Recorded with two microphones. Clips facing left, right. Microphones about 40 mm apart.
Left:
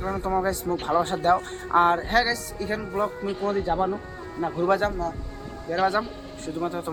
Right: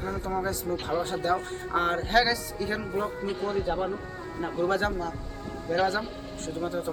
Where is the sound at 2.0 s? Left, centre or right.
Centre.